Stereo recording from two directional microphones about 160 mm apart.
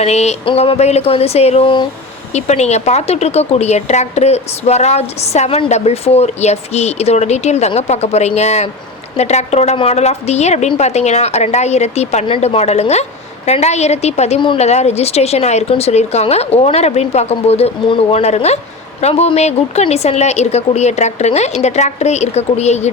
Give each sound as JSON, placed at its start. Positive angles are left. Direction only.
{"t": 0.0, "sound": "a woman's voice", "side_deg": 45}
{"t": 2.3, "sound": "a woman's voice", "side_deg": 45}